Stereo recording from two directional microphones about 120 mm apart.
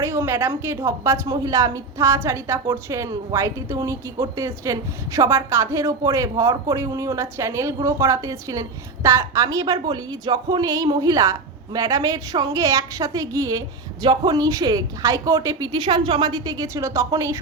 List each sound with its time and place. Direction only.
0.0 s a woman's voice: 20° right (ahead or behind)